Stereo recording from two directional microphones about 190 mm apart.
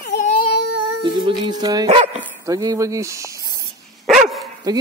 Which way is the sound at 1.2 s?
20° right (ahead or behind).